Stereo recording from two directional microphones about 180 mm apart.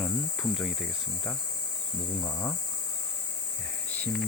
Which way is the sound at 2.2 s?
20° left (ahead or behind).